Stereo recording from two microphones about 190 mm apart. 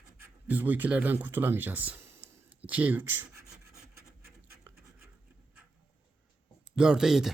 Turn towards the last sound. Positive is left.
turn(degrees=0)  # may be behind; listen again after turning